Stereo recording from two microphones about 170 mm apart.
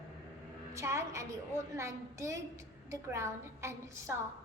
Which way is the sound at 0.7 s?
15° right (ahead or behind).